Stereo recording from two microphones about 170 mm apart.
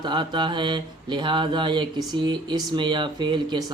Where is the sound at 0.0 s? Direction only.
30° right (ahead or behind).